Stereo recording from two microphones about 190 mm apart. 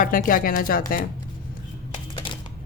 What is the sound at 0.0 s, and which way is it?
Speech, 45° left (ahead or behind).